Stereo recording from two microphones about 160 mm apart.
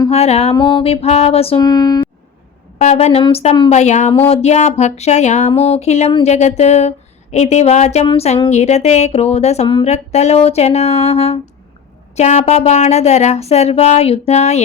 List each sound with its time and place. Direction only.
0.1 s speech: 40° left (ahead or behind)
1.6 s speech: 25° left (ahead or behind)
2.7 s a woman's voice: 45° left (ahead or behind)